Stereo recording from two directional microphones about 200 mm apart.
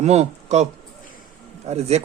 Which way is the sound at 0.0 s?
35° right (ahead or behind).